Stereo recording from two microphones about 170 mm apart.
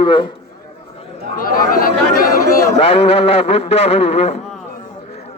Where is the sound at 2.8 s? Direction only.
30° left (ahead or behind).